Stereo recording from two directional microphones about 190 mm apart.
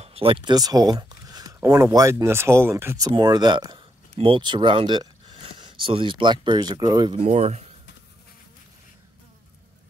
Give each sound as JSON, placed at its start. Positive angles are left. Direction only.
{"t": 0.0, "sound": "speech", "side_deg": -30}
{"t": 7.2, "sound": "speech", "side_deg": -35}